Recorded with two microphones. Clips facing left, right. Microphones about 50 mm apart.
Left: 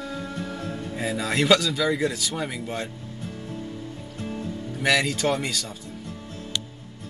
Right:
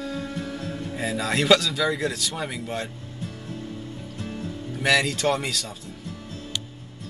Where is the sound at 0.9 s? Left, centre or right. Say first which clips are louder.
Even; centre.